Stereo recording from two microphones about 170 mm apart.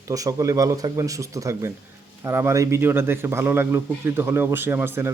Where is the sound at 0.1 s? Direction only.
20° right (ahead or behind).